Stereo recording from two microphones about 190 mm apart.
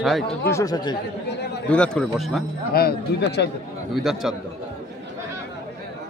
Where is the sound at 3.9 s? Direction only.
Centre (ahead or behind).